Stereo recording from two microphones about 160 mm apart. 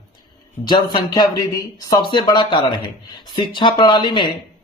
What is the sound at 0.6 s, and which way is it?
Speech, 30° left (ahead or behind).